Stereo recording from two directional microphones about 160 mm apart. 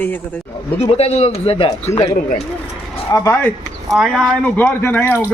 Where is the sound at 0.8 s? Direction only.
40° left (ahead or behind).